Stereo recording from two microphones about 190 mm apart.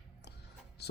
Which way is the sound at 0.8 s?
60° left (ahead or behind).